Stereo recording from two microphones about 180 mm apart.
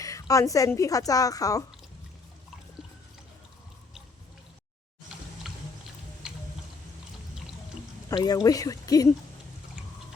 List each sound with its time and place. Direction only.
0.0 s a woman's voice: 20° left (ahead or behind)
5.5 s music: centre (ahead or behind)
8.1 s a woman's voice: 20° left (ahead or behind)